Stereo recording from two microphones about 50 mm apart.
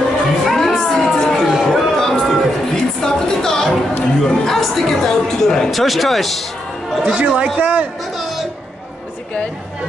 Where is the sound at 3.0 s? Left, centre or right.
Centre.